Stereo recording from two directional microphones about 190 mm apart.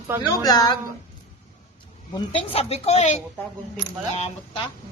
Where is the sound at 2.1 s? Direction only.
30° left (ahead or behind).